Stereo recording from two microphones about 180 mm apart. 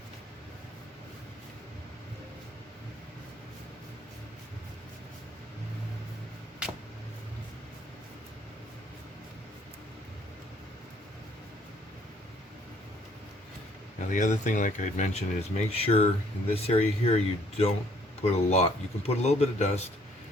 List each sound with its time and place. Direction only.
14.1 s speech: 45° left (ahead or behind)